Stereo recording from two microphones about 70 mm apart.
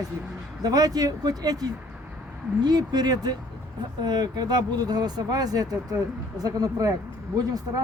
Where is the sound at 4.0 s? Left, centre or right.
Right.